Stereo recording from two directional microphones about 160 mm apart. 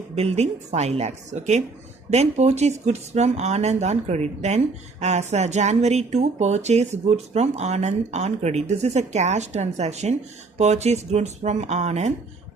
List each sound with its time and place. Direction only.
0.2 s speech: 40° right (ahead or behind)